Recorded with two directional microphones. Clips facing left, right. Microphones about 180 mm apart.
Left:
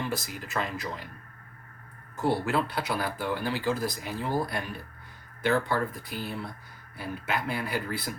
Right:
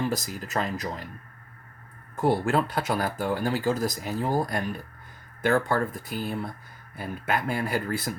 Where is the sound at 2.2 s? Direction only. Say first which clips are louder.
Right 3 dB; 50° right (ahead or behind).